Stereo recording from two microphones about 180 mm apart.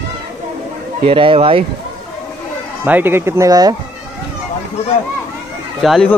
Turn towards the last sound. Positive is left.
turn(degrees=0)  # may be behind; listen again after turning